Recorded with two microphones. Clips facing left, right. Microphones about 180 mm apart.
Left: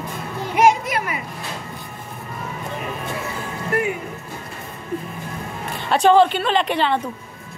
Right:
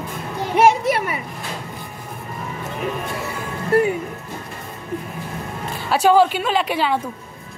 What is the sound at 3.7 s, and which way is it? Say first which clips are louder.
Music: right 6 dB; 30° right (ahead or behind).